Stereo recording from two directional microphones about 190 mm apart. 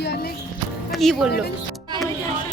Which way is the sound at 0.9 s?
Centre (ahead or behind).